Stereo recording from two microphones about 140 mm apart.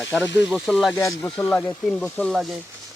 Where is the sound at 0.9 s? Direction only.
20° left (ahead or behind); by 2.6 s centre (ahead or behind).